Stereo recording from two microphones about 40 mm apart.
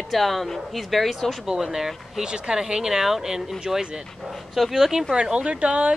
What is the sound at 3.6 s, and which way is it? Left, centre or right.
Speech, right.